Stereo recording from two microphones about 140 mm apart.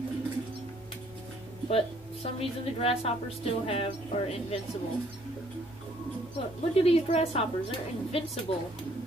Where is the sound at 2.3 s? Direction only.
45° left (ahead or behind).